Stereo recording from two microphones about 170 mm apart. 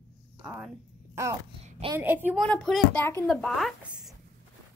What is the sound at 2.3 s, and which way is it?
Speech, centre (ahead or behind).